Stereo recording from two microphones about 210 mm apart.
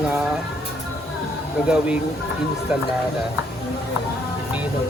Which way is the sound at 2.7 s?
5° right (ahead or behind).